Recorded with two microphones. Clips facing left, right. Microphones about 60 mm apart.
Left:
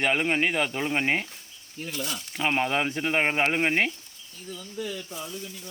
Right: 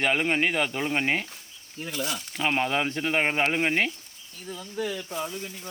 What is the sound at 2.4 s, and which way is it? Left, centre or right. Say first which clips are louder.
Speech: even; centre.